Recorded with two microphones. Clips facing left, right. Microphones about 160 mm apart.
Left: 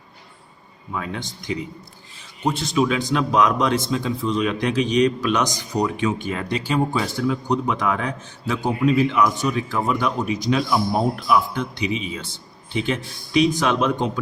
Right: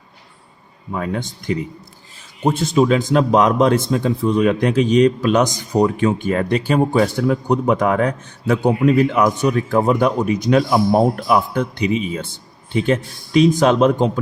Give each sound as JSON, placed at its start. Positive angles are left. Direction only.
{"t": 0.9, "sound": "speech", "side_deg": -45}